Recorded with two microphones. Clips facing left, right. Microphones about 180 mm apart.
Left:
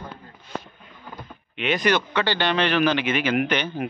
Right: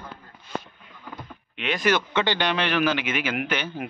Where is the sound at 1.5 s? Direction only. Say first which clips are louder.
Left 2 dB; centre (ahead or behind).